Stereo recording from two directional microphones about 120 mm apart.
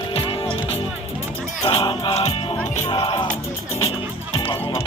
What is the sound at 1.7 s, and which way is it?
Music, 50° left (ahead or behind).